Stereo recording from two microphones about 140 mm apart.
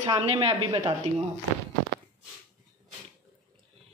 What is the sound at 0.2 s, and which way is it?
Speech, 45° right (ahead or behind).